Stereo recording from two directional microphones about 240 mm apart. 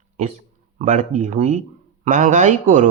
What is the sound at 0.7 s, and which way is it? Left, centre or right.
Speech, right.